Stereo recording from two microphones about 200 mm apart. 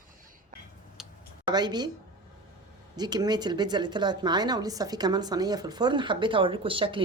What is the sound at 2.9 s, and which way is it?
Speech, 20° right (ahead or behind).